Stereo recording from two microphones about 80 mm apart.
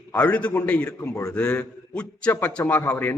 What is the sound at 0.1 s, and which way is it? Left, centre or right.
A man's voice, centre.